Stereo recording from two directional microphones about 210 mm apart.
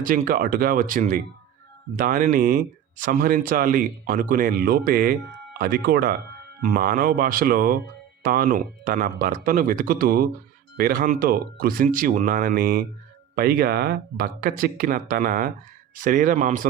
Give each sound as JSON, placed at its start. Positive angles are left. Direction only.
{"t": 0.0, "sound": "speech", "side_deg": -40}